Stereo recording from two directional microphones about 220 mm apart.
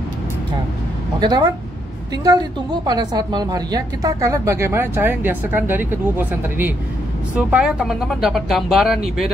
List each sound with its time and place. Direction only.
1.2 s a woman's voice: 20° right (ahead or behind); by 9.3 s centre (ahead or behind)